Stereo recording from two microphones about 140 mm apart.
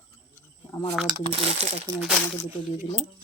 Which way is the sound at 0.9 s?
5° right (ahead or behind).